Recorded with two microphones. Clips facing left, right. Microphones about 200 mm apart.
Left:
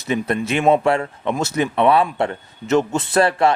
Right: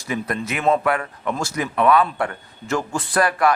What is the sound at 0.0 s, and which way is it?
A man's voice, 25° left (ahead or behind).